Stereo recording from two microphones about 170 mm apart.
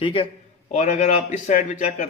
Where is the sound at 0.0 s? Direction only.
35° left (ahead or behind).